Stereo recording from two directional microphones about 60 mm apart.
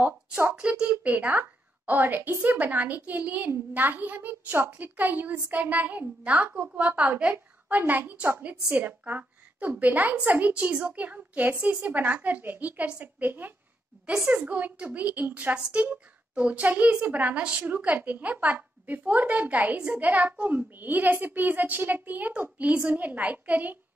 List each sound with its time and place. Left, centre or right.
0.6 s a woman's voice: centre